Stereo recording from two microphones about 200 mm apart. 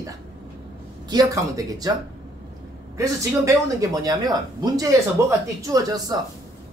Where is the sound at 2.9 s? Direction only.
15° right (ahead or behind).